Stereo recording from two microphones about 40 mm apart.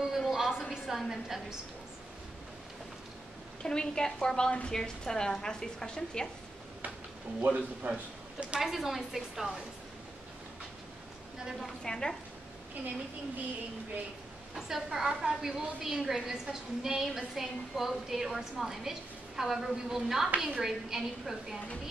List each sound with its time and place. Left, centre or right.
0.1 s a sound: centre
3.6 s a woman's voice: centre
7.4 s speech: right
8.5 s a woman's voice: centre
11.8 s a woman's voice: centre
14.5 s a woman's voice: centre